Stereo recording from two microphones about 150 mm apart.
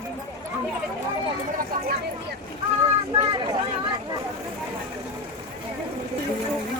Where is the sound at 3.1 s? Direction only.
30° right (ahead or behind).